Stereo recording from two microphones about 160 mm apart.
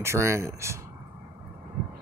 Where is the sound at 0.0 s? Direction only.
15° right (ahead or behind).